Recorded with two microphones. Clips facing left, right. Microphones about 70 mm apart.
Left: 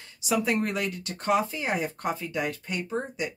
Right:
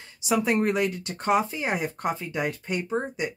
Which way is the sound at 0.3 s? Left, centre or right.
Right.